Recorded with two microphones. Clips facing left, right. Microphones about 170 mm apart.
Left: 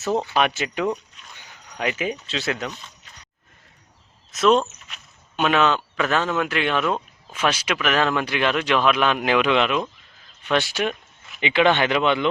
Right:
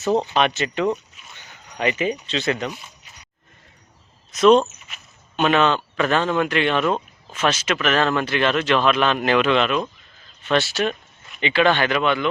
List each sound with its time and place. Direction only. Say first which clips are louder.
0.1 s speech: right 3 dB; 15° right (ahead or behind)
0.3 s speech: right 2 dB; 10° left (ahead or behind)
1.2 s a sound: even; 5° right (ahead or behind)
1.8 s speech: right 3 dB; 5° left (ahead or behind)
2.6 s speech: right 3 dB; 10° right (ahead or behind)
4.3 s speech: right 4 dB; centre (ahead or behind)
4.9 s a sound: even; centre (ahead or behind)
5.4 s speech: right 2 dB; 5° left (ahead or behind); by 12.3 s 20° left (ahead or behind)